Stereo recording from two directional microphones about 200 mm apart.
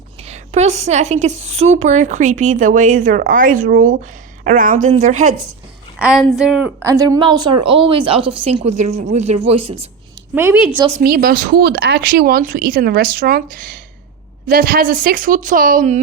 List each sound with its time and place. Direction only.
0.3 s a woman's voice: 35° right (ahead or behind)
6.0 s a woman's voice: centre (ahead or behind); by 9.7 s 30° right (ahead or behind)
10.3 s a woman's voice: 10° right (ahead or behind)
10.8 s a woman's voice: 30° right (ahead or behind)
11.0 s speech: 50° right (ahead or behind)